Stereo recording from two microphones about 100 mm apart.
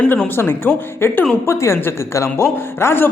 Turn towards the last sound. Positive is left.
turn(degrees=25)  # may be behind; listen again after turning